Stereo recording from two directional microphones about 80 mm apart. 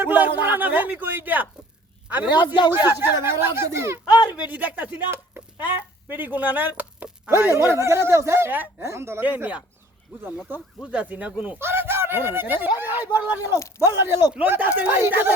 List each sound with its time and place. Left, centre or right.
0.0 s speech: right
3.0 s speech: right
4.3 s speech: right
7.3 s speech: right
9.2 s speech: right
11.6 s a sound: right
12.6 s speech: right
13.6 s speech: left
13.8 s speech: right
14.3 s speech: right